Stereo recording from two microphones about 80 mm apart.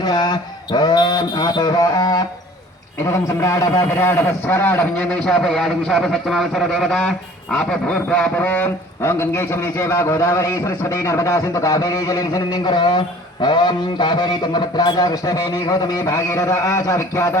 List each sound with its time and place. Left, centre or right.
0.0 s speech: left
3.0 s a man's voice: left
9.0 s a man's voice: left